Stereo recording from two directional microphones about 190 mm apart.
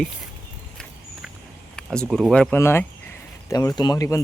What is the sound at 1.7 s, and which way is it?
Speech, 5° left (ahead or behind).